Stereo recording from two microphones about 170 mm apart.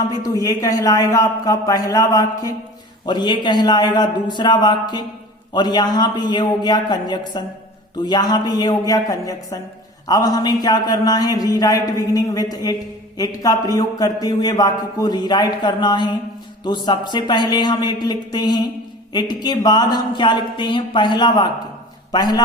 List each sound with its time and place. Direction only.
0.4 s a man's voice: 20° left (ahead or behind)